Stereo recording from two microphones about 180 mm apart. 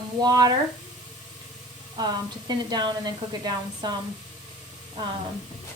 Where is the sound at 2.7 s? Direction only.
25° right (ahead or behind).